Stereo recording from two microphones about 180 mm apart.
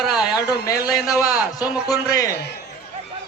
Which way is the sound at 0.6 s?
20° left (ahead or behind).